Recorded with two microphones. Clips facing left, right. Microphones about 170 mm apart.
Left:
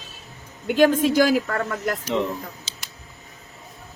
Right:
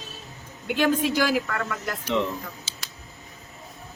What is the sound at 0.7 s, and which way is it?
A woman's voice, 45° left (ahead or behind).